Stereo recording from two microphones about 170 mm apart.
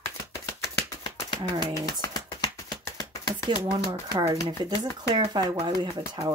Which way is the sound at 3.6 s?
30° right (ahead or behind).